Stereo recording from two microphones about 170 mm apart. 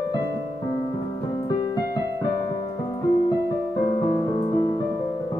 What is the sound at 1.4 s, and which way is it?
Music, 25° left (ahead or behind).